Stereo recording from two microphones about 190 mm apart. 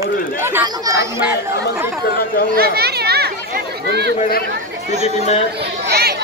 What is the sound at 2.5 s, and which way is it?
Chatter, 55° right (ahead or behind).